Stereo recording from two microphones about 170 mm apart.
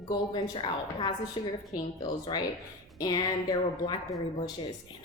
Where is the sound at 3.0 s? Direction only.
20° left (ahead or behind).